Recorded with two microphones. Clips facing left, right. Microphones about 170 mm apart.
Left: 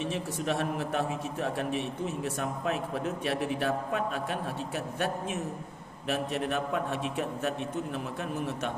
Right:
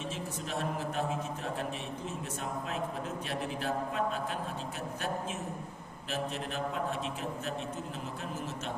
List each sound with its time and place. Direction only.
0.0 s a man's voice: 65° left (ahead or behind)